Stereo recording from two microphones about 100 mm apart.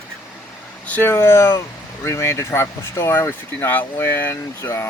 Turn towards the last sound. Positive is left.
turn(degrees=25)  # may be behind; listen again after turning